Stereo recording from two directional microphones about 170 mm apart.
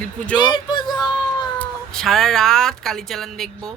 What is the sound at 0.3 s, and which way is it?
Speech, 25° left (ahead or behind).